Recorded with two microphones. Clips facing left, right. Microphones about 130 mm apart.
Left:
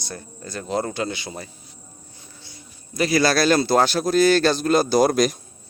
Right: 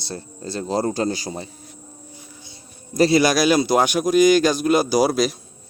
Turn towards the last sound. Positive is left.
turn(degrees=0)  # may be behind; listen again after turning